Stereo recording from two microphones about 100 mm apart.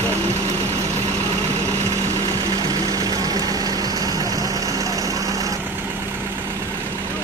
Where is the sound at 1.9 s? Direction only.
35° right (ahead or behind).